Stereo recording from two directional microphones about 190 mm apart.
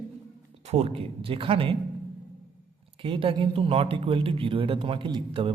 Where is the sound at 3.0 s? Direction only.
30° right (ahead or behind).